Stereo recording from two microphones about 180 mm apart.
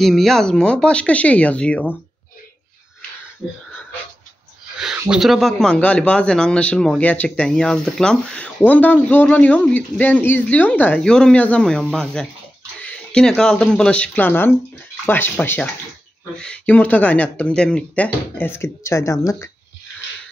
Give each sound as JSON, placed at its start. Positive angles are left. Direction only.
{"t": 0.0, "sound": "speech", "side_deg": 0}
{"t": 4.7, "sound": "a sound", "side_deg": -5}
{"t": 5.1, "sound": "speech", "side_deg": 0}